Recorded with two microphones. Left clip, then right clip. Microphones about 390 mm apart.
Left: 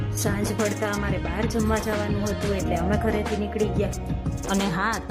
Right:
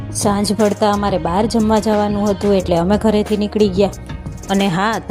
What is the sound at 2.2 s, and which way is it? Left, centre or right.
Speech, centre.